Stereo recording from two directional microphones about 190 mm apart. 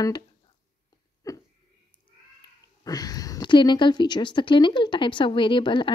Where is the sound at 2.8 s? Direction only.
20° left (ahead or behind).